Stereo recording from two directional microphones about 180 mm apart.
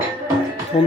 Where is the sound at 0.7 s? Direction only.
40° left (ahead or behind).